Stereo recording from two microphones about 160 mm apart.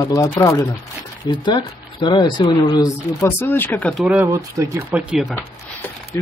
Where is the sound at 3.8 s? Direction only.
5° right (ahead or behind).